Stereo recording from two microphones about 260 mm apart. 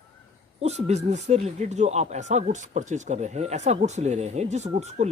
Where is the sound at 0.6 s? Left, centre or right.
Right.